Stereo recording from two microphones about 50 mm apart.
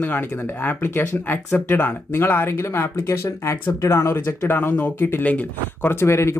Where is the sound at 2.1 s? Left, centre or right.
Left.